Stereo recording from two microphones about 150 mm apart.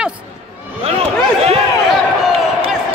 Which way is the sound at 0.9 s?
40° right (ahead or behind).